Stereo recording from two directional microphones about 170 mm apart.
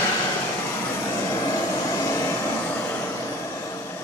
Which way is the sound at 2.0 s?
15° left (ahead or behind).